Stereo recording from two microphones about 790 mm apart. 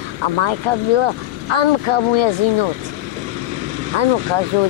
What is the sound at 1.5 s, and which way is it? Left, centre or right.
Speech, left.